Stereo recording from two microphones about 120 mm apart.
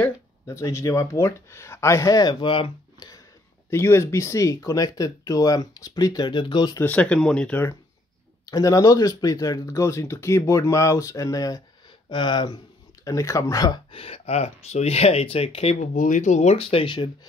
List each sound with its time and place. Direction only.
0.5 s speech: 25° left (ahead or behind)
2.4 s speech: 45° left (ahead or behind)
3.7 s speech: 25° left (ahead or behind); by 6.7 s 40° left (ahead or behind)
6.8 s speech: 10° left (ahead or behind)
8.5 s speech: 30° left (ahead or behind)
12.1 s speech: 40° left (ahead or behind)
13.0 s speech: 25° left (ahead or behind)
13.8 s speech: 50° left (ahead or behind)